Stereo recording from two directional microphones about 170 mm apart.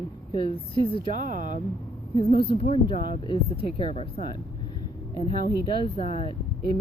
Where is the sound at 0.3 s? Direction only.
30° left (ahead or behind).